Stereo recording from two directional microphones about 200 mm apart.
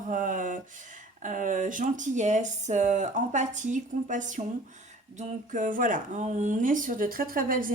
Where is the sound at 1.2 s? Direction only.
40° right (ahead or behind).